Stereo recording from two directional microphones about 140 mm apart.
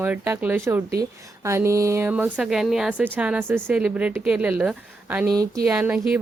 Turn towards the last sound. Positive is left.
turn(degrees=-10)  # may be behind; listen again after turning